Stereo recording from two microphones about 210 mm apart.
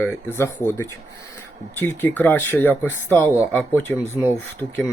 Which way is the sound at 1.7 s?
10° left (ahead or behind).